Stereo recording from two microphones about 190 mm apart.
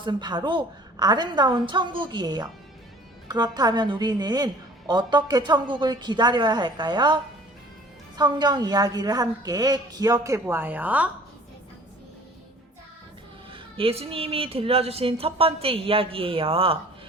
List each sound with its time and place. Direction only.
0.0 s a woman's voice: 25° right (ahead or behind)
13.5 s a woman's voice: 30° right (ahead or behind)